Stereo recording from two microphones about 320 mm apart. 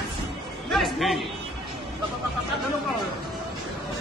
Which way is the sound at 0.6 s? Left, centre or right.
Centre.